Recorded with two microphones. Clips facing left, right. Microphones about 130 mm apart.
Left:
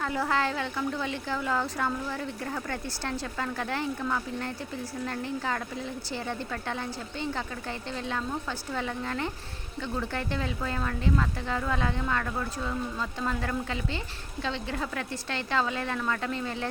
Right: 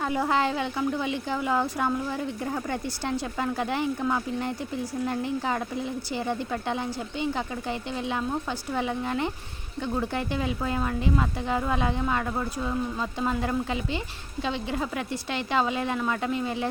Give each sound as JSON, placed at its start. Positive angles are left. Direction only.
{"t": 0.0, "sound": "a woman's voice", "side_deg": -20}